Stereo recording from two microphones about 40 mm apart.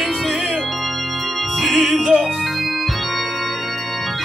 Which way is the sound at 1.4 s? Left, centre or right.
Centre.